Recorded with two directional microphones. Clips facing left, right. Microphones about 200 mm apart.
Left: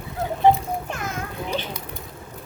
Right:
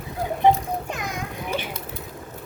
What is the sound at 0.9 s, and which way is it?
Children playing, 15° right (ahead or behind).